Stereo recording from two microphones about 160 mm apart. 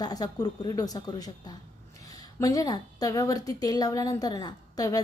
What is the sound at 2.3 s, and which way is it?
A woman's voice, 20° left (ahead or behind).